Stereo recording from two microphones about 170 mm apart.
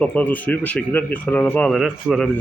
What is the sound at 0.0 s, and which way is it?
Speech, 10° left (ahead or behind).